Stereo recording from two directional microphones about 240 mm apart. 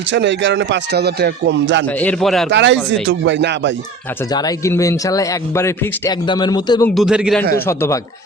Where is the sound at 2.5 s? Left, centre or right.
Right.